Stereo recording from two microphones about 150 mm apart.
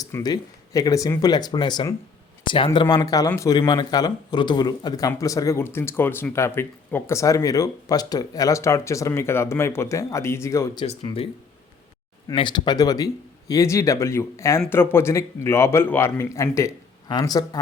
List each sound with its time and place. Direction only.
0.0 s speech: 25° left (ahead or behind)
2.4 s a sound: 35° left (ahead or behind)
2.9 s speech: 25° left (ahead or behind)
10.8 s speech: 40° left (ahead or behind)
12.3 s a man's voice: 35° left (ahead or behind)